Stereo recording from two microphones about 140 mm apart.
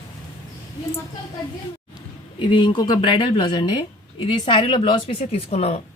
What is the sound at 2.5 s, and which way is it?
A woman's voice, 35° left (ahead or behind).